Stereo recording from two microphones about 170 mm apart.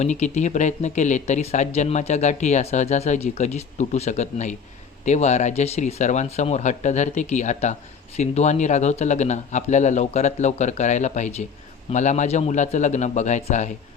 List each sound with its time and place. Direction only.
0.0 s speech: 45° left (ahead or behind)